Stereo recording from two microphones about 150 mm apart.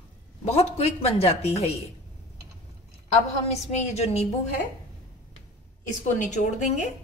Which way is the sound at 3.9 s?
45° left (ahead or behind).